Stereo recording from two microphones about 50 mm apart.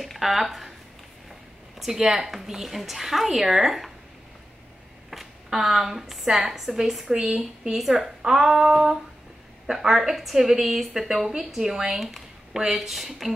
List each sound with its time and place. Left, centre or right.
0.0 s speech: centre
1.8 s a woman's voice: centre
5.1 s a woman's voice: centre